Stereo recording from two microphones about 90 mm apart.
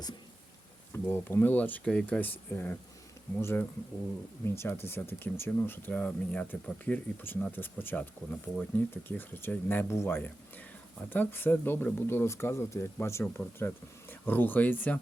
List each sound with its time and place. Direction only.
0.9 s speech: 25° left (ahead or behind)
1.8 s speech: 10° left (ahead or behind)